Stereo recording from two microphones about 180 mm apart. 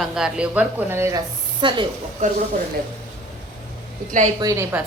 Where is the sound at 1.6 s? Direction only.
25° right (ahead or behind).